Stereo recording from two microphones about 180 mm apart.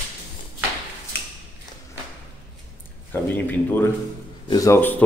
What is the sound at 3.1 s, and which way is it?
Speech, 10° left (ahead or behind).